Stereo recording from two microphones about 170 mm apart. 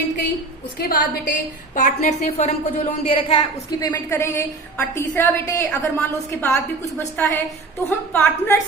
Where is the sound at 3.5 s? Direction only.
20° left (ahead or behind).